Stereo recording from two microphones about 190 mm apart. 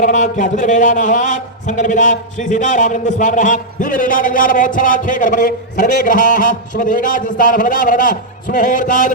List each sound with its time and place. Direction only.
0.0 s a man's voice: 40° left (ahead or behind)